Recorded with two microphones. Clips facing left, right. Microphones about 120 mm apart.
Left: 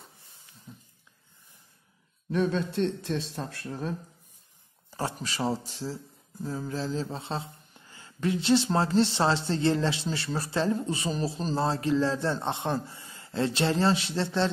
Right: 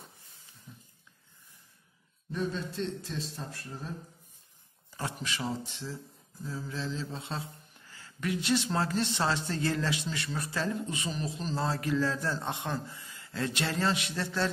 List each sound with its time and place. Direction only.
0.7 s a sound: 20° left (ahead or behind)
2.3 s a man's voice: 70° left (ahead or behind)
4.9 s speech: 35° left (ahead or behind)